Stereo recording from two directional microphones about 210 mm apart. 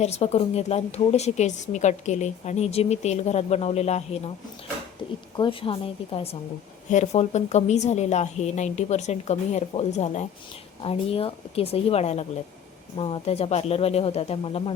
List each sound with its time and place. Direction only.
0.0 s a woman's voice: 30° left (ahead or behind)
5.4 s a woman's voice: 25° left (ahead or behind)